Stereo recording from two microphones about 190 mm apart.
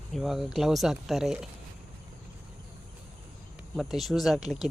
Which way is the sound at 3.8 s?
Centre (ahead or behind).